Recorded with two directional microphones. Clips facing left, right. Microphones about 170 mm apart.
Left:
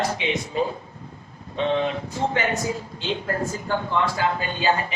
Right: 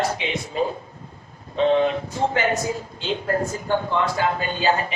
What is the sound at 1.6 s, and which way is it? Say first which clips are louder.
A man's voice: right 4 dB; 35° right (ahead or behind).